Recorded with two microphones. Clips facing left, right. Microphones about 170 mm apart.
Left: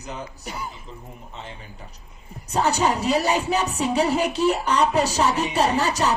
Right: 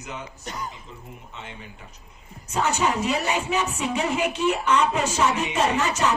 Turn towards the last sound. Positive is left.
turn(degrees=35)  # may be behind; listen again after turning